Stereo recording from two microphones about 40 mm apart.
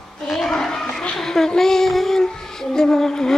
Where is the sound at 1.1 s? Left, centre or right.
Centre.